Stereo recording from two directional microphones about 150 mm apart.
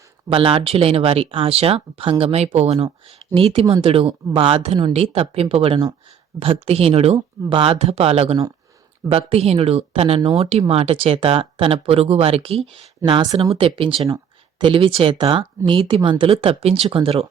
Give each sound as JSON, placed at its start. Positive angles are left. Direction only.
{"t": 0.3, "sound": "speech", "side_deg": -35}